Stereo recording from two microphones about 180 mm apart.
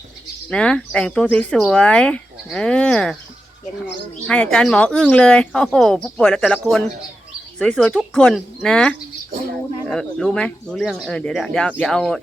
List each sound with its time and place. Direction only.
0.5 s speech: 5° left (ahead or behind)
4.3 s speech: 5° left (ahead or behind)